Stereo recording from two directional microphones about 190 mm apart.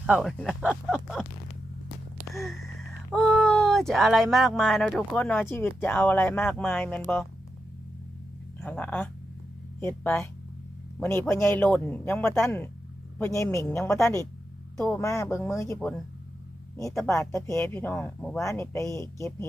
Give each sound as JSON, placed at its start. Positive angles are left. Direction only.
{"t": 0.0, "sound": "speech", "side_deg": -5}
{"t": 2.3, "sound": "speech", "side_deg": 0}
{"t": 8.6, "sound": "speech", "side_deg": 10}
{"t": 17.1, "sound": "speech", "side_deg": 15}